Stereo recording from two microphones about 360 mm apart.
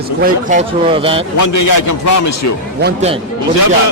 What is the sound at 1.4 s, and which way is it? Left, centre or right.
A man's voice, left.